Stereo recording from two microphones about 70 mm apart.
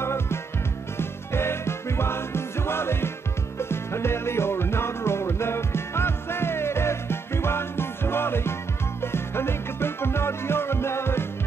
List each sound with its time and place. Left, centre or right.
0.0 s music: left